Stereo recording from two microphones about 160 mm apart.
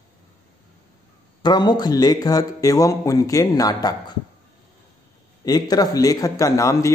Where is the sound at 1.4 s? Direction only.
25° left (ahead or behind).